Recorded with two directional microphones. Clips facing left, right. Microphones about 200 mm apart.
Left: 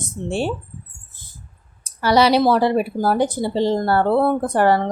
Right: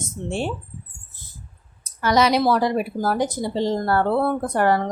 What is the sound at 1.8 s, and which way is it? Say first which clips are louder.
Speech: left 3 dB; 30° left (ahead or behind).